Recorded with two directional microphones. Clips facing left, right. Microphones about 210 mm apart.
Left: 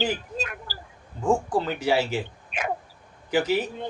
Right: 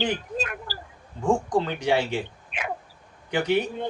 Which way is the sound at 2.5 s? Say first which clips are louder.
Left 5 dB; 45° left (ahead or behind).